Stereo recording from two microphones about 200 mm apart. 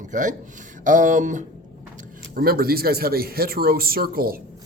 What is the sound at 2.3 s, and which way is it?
Speech, 50° right (ahead or behind).